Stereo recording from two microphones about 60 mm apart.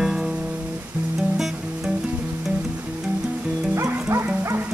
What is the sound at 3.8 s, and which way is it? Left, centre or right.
Music, right.